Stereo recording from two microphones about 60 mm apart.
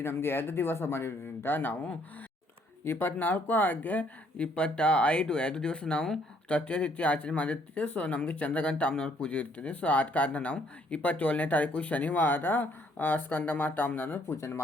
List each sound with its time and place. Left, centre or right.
0.0 s speech: left